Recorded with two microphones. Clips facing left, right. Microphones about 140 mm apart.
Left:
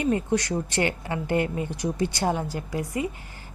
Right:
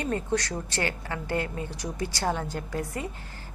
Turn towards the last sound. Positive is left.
turn(degrees=10)  # may be behind; listen again after turning